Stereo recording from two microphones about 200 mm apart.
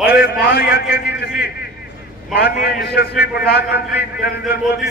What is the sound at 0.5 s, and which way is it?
Speech, 50° left (ahead or behind).